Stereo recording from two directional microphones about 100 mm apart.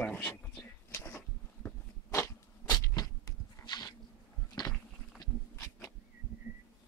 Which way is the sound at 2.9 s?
40° left (ahead or behind).